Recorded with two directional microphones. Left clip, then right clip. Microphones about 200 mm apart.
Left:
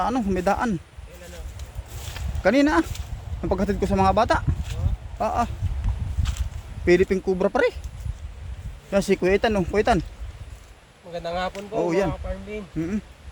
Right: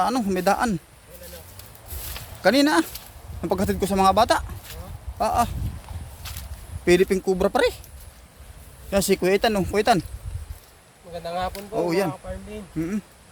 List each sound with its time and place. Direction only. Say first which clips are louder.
0.0 s speech: right 1 dB; 15° right (ahead or behind)
2.1 s speech: right 1 dB; 15° right (ahead or behind)
4.7 s a sound: left 2 dB; 20° right (ahead or behind)
6.8 s speech: even; 15° right (ahead or behind)
8.9 s speech: even; 5° right (ahead or behind)
11.1 s speech: left 1 dB; 10° left (ahead or behind)
11.8 s speech: even; 5° right (ahead or behind)